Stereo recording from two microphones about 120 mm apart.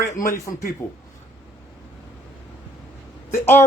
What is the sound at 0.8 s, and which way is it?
Speech, 25° left (ahead or behind).